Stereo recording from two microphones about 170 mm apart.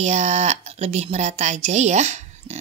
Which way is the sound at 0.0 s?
40° right (ahead or behind).